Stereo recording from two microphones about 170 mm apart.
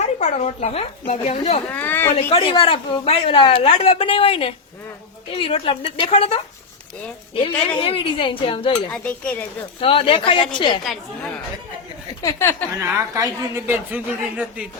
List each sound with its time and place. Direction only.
0.0 s speech: 40° left (ahead or behind)
1.7 s speech: 10° left (ahead or behind)
2.1 s speech: 30° left (ahead or behind)
8.9 s speech: 10° left (ahead or behind)
9.8 s speech: 35° left (ahead or behind)
12.2 s speech: 15° left (ahead or behind)
12.8 s a man's voice: 15° right (ahead or behind)